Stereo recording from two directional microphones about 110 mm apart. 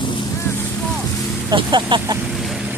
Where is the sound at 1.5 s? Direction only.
45° right (ahead or behind).